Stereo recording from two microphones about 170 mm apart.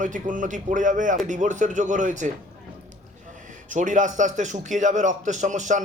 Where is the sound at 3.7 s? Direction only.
50° right (ahead or behind).